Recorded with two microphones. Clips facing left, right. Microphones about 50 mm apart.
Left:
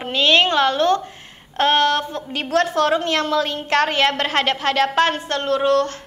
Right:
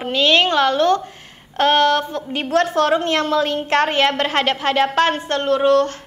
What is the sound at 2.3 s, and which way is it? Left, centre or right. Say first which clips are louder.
A woman's voice: right 1 dB; right.